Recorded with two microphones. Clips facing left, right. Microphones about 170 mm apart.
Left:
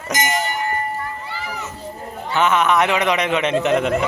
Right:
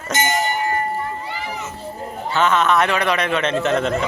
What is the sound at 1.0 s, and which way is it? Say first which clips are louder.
Run: right 2 dB; 25° right (ahead or behind).